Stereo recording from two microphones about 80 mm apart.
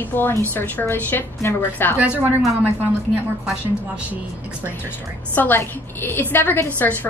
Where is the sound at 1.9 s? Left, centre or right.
Centre.